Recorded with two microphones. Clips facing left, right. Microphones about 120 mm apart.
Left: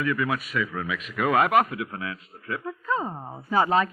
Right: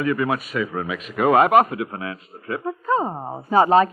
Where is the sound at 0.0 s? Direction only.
35° right (ahead or behind).